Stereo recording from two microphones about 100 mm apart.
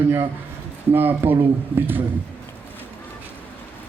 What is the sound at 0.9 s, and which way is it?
Speech, 20° right (ahead or behind).